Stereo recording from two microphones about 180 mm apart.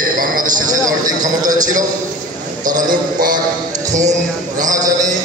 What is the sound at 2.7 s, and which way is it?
Speech, 50° right (ahead or behind).